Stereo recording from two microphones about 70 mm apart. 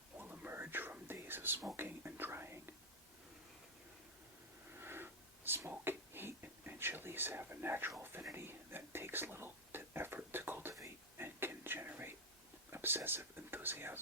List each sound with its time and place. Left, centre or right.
0.2 s whispering: right
4.8 s a sound: right
5.8 s whispering: right